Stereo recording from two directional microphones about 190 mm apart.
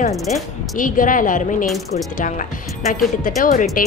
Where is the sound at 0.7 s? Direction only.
45° left (ahead or behind).